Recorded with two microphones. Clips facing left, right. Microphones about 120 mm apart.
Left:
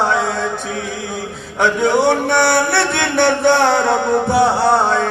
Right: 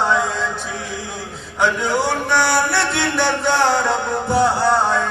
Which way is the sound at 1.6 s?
60° left (ahead or behind).